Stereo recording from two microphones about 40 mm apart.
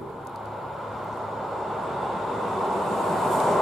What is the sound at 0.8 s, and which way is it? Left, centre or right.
Vehicle, centre.